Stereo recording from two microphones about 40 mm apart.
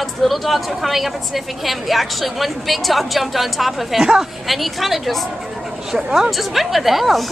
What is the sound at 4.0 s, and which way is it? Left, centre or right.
Speech, centre.